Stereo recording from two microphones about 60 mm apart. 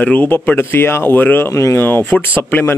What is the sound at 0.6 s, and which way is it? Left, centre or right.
Speech, left.